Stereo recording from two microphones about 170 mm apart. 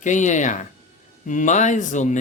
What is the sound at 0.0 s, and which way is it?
Speech, 45° left (ahead or behind).